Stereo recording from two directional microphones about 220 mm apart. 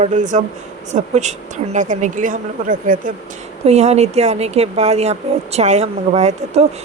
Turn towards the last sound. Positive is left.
turn(degrees=-30)  # may be behind; listen again after turning